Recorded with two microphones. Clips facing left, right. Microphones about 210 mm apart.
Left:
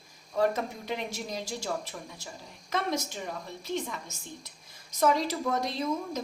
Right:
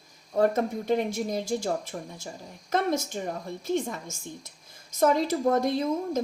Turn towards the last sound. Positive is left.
turn(degrees=-50)  # may be behind; listen again after turning